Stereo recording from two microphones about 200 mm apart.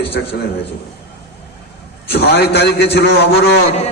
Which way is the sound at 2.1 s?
55° left (ahead or behind).